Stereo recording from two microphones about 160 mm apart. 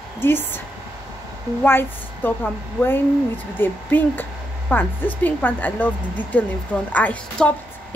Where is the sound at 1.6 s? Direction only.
15° left (ahead or behind).